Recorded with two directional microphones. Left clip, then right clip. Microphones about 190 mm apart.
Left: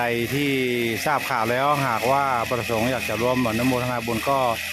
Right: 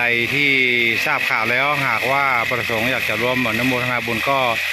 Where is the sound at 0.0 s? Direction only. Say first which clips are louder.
Right 7 dB; 10° left (ahead or behind).